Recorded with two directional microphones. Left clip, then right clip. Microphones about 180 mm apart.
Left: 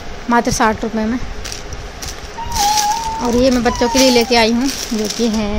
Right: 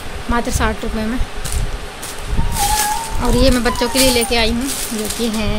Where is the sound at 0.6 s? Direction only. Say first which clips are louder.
Left 5 dB; 30° left (ahead or behind).